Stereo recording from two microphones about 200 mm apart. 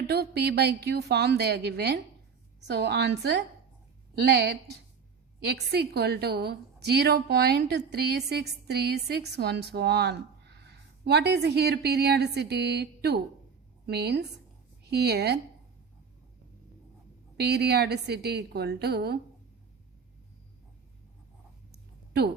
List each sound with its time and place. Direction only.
0.1 s a woman's voice: 55° right (ahead or behind)
17.3 s a woman's voice: 55° right (ahead or behind)
21.7 s a sound: 55° right (ahead or behind)